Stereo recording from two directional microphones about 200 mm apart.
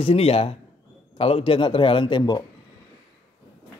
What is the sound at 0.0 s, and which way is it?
A man's voice, 30° left (ahead or behind).